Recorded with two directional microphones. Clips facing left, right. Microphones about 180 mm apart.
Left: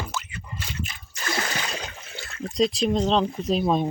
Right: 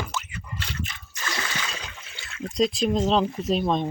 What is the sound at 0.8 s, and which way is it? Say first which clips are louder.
Splash: left 3 dB; 35° left (ahead or behind).